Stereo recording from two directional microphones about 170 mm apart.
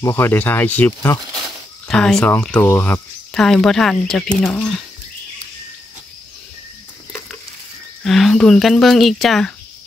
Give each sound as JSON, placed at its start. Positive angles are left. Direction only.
{"t": 0.0, "sound": "speech", "side_deg": 10}
{"t": 8.0, "sound": "speech", "side_deg": 0}